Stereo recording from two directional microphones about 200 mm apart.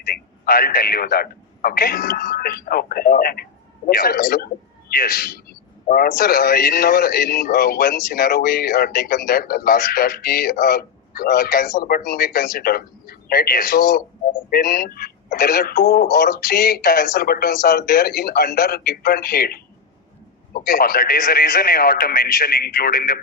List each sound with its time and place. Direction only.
0.0 s a man's voice: 45° left (ahead or behind)